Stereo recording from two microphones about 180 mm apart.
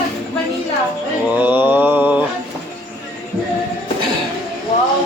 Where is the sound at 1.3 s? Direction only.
10° right (ahead or behind).